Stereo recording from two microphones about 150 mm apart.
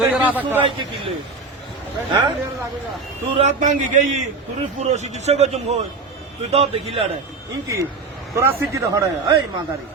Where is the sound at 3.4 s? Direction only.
55° right (ahead or behind).